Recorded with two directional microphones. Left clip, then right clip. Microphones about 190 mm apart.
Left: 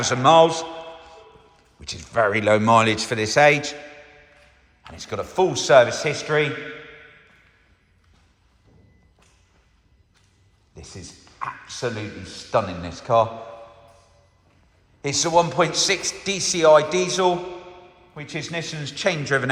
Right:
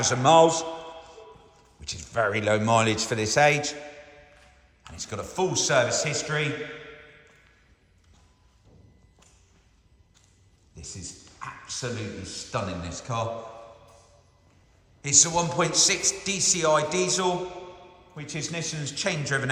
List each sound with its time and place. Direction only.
0.0 s a sound: 15° right (ahead or behind)
1.8 s a man's voice: 10° right (ahead or behind)
4.8 s a man's voice: 10° right (ahead or behind)
10.8 s a man's voice: 5° right (ahead or behind)
15.0 s a man's voice: 5° right (ahead or behind)